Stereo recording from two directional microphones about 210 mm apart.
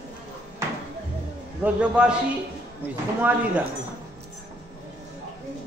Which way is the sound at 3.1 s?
10° right (ahead or behind).